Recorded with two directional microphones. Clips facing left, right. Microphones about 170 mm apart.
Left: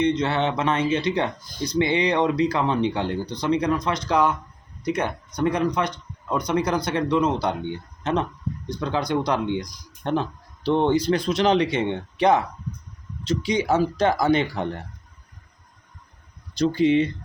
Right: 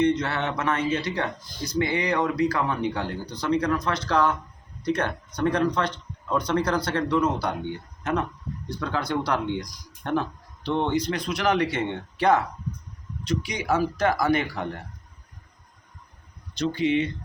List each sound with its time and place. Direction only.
0.0 s speech: 20° left (ahead or behind)
10.6 s speech: 30° left (ahead or behind)
16.6 s speech: 35° left (ahead or behind)